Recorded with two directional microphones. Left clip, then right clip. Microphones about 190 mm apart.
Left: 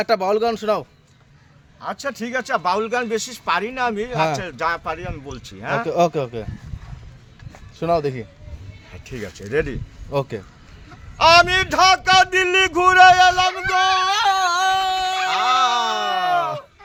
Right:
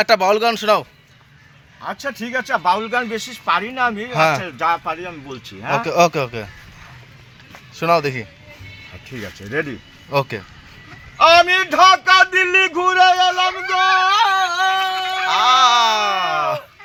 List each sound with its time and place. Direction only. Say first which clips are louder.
0.0 s speech: right 4 dB; 10° left (ahead or behind)
1.8 s speech: right 1 dB; 25° left (ahead or behind)
4.1 s speech: right 7 dB; 5° left (ahead or behind)
4.4 s speech: right 4 dB; 20° left (ahead or behind)
5.8 s speech: right 3 dB; 10° left (ahead or behind)
7.8 s speech: right 4 dB; 5° left (ahead or behind)
9.0 s speech: left 1 dB; 25° left (ahead or behind)
10.1 s speech: right 4 dB; 5° left (ahead or behind)
11.2 s speech: right 2 dB; 25° left (ahead or behind)
13.7 s a sound: right 4 dB; 30° left (ahead or behind)
15.3 s speech: right 6 dB; 10° left (ahead or behind)